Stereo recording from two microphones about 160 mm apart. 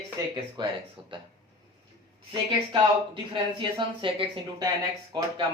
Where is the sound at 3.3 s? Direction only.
30° right (ahead or behind).